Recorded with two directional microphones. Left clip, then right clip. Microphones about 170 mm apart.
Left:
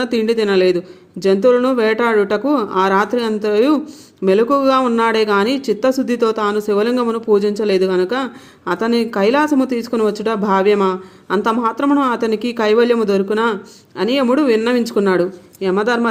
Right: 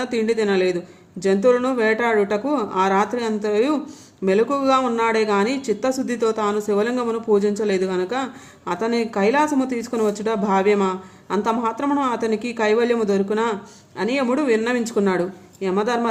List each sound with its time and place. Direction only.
0.0 s speech: 25° left (ahead or behind)